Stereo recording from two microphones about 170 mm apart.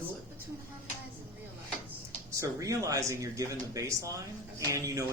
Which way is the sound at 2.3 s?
20° right (ahead or behind).